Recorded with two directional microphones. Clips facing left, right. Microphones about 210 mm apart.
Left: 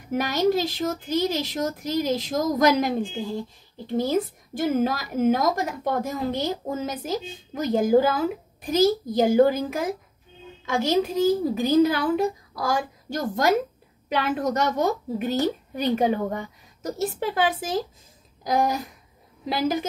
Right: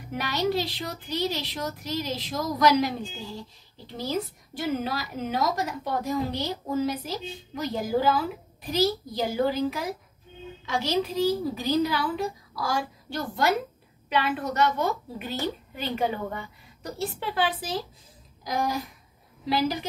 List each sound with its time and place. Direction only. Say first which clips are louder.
0.1 s a woman's voice: left 5 dB; 45° left (ahead or behind)
19.5 s a woman's voice: left 2 dB; 45° left (ahead or behind)